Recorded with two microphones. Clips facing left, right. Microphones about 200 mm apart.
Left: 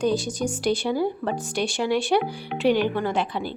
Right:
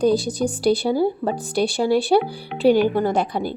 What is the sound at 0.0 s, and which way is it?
Speech, 35° right (ahead or behind).